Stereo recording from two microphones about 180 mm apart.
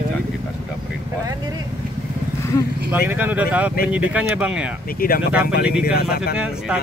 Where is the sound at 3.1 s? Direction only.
10° right (ahead or behind).